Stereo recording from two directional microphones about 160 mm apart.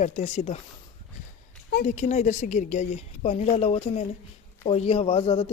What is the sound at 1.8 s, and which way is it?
A woman's voice, 50° left (ahead or behind).